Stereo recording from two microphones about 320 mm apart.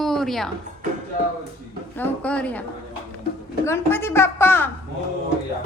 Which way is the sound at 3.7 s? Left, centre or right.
Centre.